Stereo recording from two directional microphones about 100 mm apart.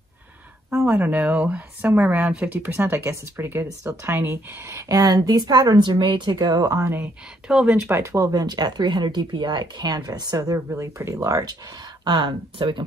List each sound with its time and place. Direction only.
0.8 s speech: 15° right (ahead or behind); by 6.9 s 40° right (ahead or behind)
7.4 s speech: 5° right (ahead or behind)
7.9 s speech: 25° right (ahead or behind)
12.0 s speech: 50° right (ahead or behind)